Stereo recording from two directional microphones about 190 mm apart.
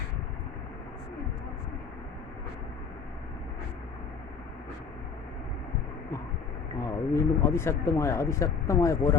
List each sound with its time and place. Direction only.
6.8 s speech: 15° left (ahead or behind)